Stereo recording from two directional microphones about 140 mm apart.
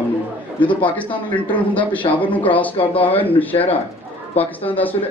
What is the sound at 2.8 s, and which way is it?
Speech, 40° left (ahead or behind).